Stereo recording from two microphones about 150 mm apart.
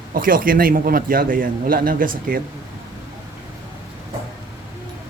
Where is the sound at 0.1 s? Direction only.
70° right (ahead or behind).